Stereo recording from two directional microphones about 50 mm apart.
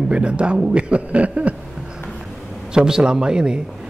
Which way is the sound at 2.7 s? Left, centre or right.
Centre.